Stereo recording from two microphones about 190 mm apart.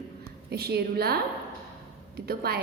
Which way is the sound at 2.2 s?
55° right (ahead or behind).